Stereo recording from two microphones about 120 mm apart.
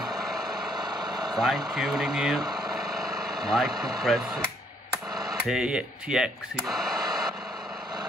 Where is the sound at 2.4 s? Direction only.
35° right (ahead or behind).